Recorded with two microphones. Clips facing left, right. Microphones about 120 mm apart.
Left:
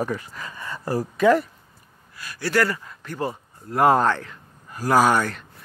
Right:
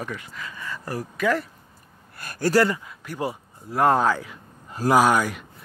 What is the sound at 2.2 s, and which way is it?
Speech, 50° right (ahead or behind).